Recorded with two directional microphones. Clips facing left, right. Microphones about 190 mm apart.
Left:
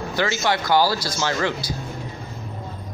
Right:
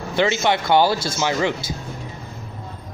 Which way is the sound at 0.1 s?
20° right (ahead or behind).